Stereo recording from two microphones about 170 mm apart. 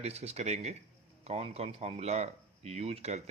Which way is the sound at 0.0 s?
40° right (ahead or behind).